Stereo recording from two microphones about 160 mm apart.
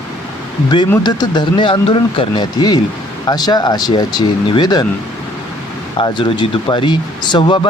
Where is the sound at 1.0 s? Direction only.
25° left (ahead or behind).